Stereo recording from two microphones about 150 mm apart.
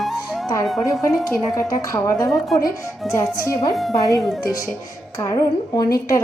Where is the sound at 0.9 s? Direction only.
20° left (ahead or behind).